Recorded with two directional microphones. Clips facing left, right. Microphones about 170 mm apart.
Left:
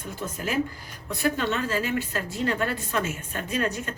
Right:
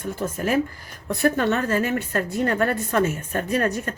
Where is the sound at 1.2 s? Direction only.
50° right (ahead or behind).